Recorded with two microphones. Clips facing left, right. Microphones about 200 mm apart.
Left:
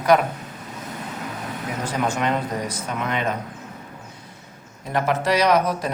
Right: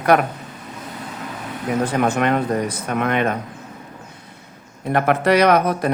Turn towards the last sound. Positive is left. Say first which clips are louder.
# right 3 dB
turn(degrees=-60)  # may be behind; listen again after turning